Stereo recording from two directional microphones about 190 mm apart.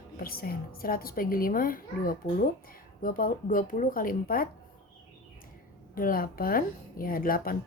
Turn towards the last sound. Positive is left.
turn(degrees=50)  # may be behind; listen again after turning